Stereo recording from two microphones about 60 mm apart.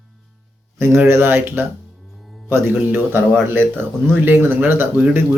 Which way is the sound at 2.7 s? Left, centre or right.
Right.